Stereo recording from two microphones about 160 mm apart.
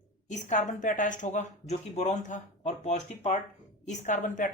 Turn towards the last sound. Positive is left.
turn(degrees=50)  # may be behind; listen again after turning